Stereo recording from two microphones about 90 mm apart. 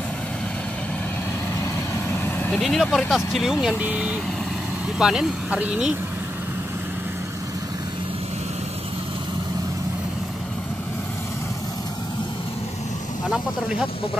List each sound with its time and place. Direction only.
1.6 s vehicle: 25° left (ahead or behind)
2.6 s speech: centre (ahead or behind)
3.6 s speech: 10° right (ahead or behind)